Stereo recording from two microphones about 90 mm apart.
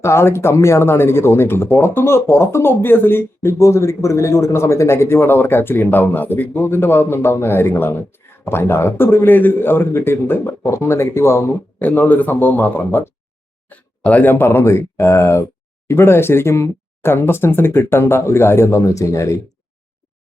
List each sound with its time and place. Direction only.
0.0 s a man's voice: 30° left (ahead or behind)